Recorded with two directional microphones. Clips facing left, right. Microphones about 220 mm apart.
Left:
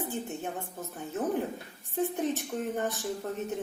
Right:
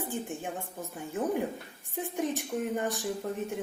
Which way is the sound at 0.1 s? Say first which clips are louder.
Even; 15° right (ahead or behind).